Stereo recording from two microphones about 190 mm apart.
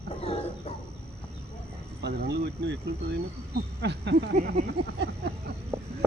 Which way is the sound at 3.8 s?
65° right (ahead or behind).